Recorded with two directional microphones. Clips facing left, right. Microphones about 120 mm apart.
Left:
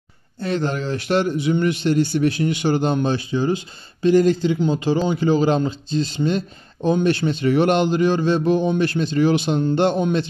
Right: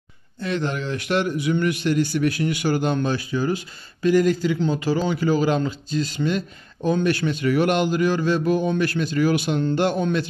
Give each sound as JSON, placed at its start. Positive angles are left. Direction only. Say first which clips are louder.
{"t": 0.4, "sound": "speech", "louder": "left 3 dB", "side_deg": 35}